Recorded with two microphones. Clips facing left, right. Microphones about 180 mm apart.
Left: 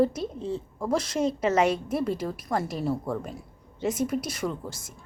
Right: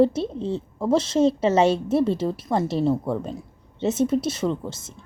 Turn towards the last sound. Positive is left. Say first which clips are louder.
# right 6 dB
turn(degrees=-25)  # may be behind; listen again after turning